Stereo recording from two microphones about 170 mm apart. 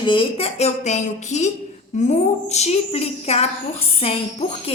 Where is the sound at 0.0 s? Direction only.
30° left (ahead or behind).